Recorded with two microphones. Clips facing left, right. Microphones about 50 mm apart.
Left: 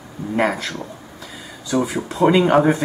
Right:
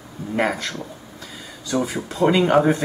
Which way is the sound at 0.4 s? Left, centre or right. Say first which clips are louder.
Left 2 dB; centre.